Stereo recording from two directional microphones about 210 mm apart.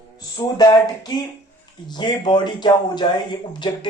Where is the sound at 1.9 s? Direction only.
20° left (ahead or behind).